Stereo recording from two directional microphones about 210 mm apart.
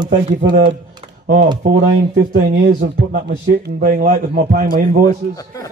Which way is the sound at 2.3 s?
45° right (ahead or behind).